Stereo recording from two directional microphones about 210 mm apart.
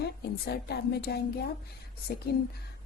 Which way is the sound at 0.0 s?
50° left (ahead or behind).